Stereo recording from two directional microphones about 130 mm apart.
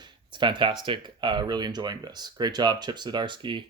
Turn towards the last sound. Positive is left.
turn(degrees=-40)  # may be behind; listen again after turning